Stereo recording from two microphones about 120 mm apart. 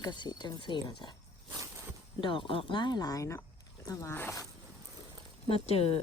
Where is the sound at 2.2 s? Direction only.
45° left (ahead or behind); by 4.3 s 20° left (ahead or behind).